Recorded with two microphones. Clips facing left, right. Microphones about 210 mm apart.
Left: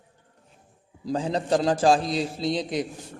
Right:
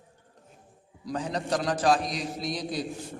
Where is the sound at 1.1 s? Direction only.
25° left (ahead or behind).